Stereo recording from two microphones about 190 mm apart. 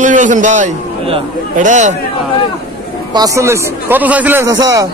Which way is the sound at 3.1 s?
20° right (ahead or behind).